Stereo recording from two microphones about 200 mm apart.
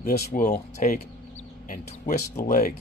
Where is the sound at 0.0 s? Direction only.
45° left (ahead or behind).